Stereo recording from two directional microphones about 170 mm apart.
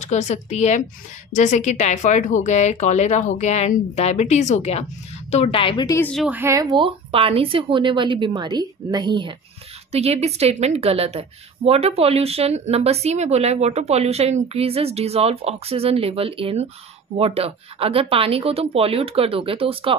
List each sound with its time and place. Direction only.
0.0 s a woman's voice: 45° left (ahead or behind)
5.9 s a woman's voice: 15° left (ahead or behind)
6.1 s speech: 5° right (ahead or behind)
6.4 s speech: 20° right (ahead or behind)
9.9 s a woman's voice: 40° right (ahead or behind)